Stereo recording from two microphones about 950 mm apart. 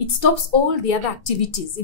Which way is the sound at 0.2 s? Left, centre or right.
Left.